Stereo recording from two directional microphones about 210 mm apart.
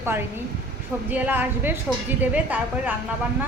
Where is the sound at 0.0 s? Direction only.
10° right (ahead or behind).